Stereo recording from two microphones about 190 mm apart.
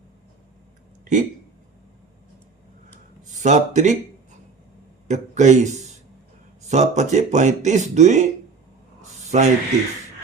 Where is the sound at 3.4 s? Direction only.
40° right (ahead or behind).